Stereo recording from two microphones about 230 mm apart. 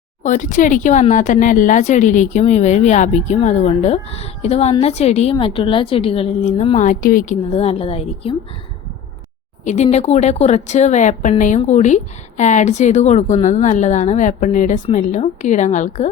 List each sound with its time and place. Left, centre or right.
0.2 s speech: left
7.5 s a woman's voice: left
9.6 s speech: left